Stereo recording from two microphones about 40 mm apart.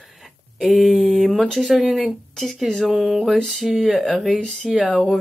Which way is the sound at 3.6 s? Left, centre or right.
Centre.